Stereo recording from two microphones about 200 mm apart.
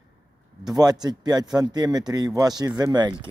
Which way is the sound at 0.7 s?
20° right (ahead or behind).